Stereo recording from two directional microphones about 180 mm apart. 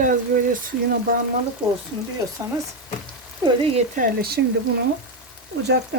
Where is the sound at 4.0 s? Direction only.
60° right (ahead or behind).